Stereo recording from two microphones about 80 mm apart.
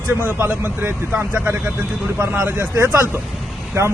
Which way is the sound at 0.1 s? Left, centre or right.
Right.